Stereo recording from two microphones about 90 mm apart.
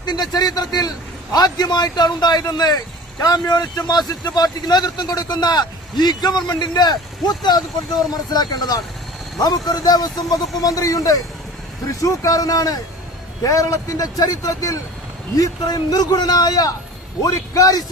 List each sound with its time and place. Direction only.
0.0 s speech: 50° left (ahead or behind)